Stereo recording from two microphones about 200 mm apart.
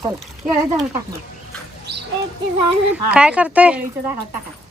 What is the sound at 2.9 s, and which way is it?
Speech, 5° right (ahead or behind).